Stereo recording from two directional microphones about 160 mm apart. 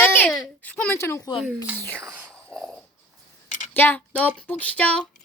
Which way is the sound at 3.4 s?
50° left (ahead or behind).